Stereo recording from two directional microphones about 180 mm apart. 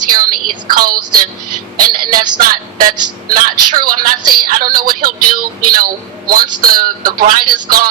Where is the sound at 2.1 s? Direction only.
50° right (ahead or behind).